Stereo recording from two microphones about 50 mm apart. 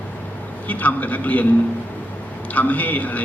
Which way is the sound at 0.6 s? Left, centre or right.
Left.